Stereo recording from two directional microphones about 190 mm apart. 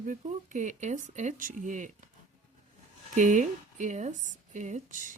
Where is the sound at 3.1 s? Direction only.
40° right (ahead or behind).